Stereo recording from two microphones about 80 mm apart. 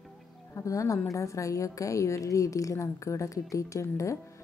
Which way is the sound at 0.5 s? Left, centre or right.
Left.